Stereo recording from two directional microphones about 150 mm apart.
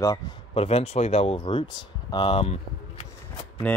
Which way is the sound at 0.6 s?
40° left (ahead or behind).